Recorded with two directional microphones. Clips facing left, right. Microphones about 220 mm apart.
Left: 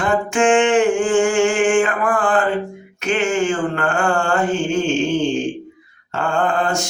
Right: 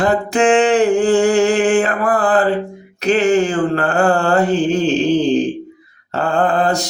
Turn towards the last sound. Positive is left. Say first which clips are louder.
# right 3 dB
turn(degrees=-35)  # may be behind; listen again after turning